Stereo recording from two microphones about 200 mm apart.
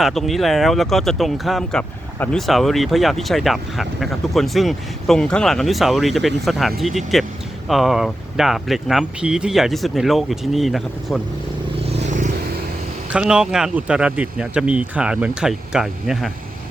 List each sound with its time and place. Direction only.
0.0 s speech: centre (ahead or behind)
11.9 s vehicle: 35° right (ahead or behind)
13.1 s speech: 5° right (ahead or behind)